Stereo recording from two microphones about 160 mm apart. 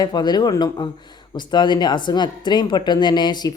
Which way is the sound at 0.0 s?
25° left (ahead or behind).